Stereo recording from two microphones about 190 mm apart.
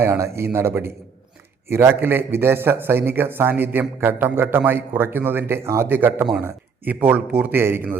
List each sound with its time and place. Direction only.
0.0 s a man's voice: 15° right (ahead or behind)